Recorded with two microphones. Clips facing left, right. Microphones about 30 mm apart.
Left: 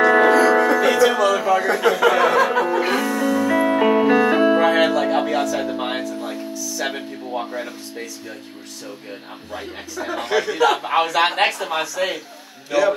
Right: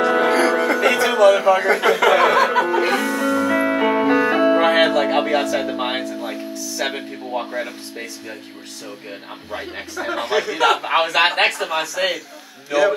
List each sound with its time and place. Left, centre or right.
0.0 s music: centre
0.7 s music: right
1.8 s speech: right
2.0 s music: right
2.3 s speech: right
2.8 s music: centre
4.6 s music: right
5.1 s music: right
5.6 s speech: right
6.5 s music: right
9.9 s speech: right
10.2 s speech: centre
10.6 s a man's voice: right